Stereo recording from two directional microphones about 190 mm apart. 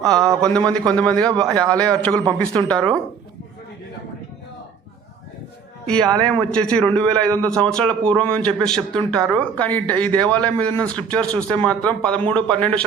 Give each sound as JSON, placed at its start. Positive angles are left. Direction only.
{"t": 0.0, "sound": "a sound", "side_deg": 5}
{"t": 0.9, "sound": "a man's voice", "side_deg": 5}
{"t": 1.5, "sound": "a man's voice", "side_deg": -20}
{"t": 1.8, "sound": "a man's voice", "side_deg": 5}
{"t": 5.8, "sound": "a man's voice", "side_deg": 5}